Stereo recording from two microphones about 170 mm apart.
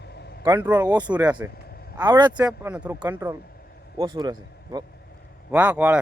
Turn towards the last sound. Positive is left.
turn(degrees=-5)  # may be behind; listen again after turning